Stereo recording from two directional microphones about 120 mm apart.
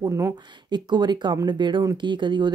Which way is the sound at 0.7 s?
40° right (ahead or behind).